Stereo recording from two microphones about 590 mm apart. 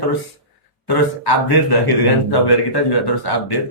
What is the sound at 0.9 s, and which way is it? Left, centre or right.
Speech, left.